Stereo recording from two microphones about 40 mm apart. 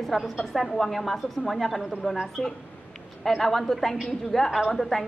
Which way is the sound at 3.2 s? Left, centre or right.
Centre.